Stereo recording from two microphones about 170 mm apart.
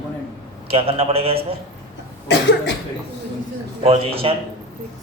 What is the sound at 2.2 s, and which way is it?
Cough, 90° left.